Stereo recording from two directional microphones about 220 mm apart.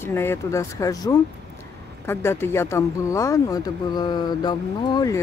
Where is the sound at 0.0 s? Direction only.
10° left (ahead or behind).